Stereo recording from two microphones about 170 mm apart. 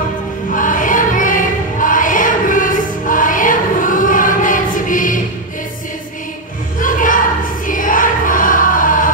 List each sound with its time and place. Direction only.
0.6 s choir: 50° left (ahead or behind)
6.8 s choir: 50° left (ahead or behind)